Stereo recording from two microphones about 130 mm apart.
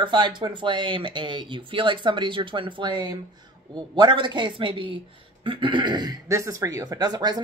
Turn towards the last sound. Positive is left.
turn(degrees=-30)  # may be behind; listen again after turning